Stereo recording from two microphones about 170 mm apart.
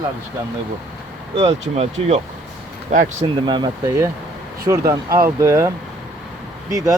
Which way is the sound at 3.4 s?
25° right (ahead or behind).